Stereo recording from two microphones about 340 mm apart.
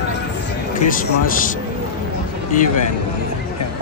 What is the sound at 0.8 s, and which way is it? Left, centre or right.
Speech, left.